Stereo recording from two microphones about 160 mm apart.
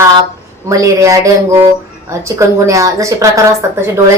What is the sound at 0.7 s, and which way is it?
A woman's voice, 20° right (ahead or behind).